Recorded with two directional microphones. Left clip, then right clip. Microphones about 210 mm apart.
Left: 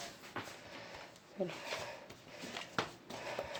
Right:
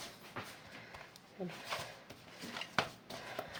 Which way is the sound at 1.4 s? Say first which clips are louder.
Left 6 dB; 35° left (ahead or behind).